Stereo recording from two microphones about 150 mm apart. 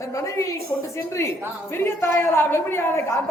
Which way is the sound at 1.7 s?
15° left (ahead or behind).